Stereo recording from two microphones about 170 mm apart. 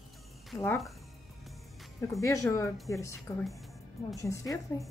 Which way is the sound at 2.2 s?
20° left (ahead or behind).